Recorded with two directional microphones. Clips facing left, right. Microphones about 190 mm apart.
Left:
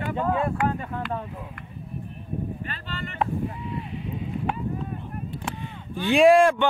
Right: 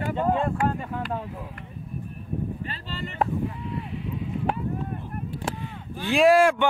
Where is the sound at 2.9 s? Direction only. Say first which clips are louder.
Right 1 dB; 35° right (ahead or behind).